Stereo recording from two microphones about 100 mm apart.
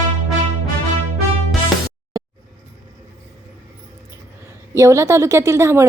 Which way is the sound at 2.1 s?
40° right (ahead or behind).